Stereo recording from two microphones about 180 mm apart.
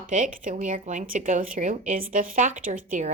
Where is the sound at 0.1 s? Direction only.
45° right (ahead or behind).